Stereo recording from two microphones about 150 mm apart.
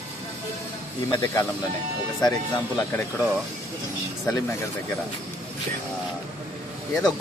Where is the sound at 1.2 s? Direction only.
20° left (ahead or behind).